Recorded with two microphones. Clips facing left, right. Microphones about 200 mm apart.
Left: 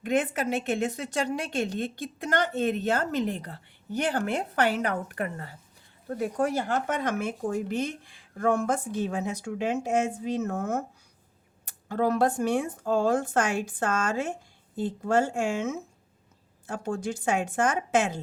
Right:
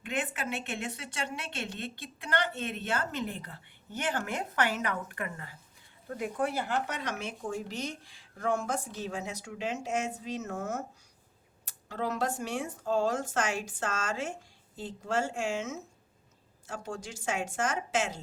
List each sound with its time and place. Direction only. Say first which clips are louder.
0.0 s a woman's voice: left 8 dB; 40° left (ahead or behind)